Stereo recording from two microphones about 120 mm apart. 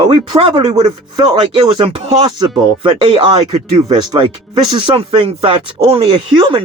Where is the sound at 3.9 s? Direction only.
40° right (ahead or behind).